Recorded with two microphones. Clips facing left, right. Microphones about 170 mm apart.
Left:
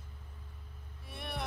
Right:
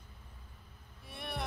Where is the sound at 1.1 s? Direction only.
Centre (ahead or behind).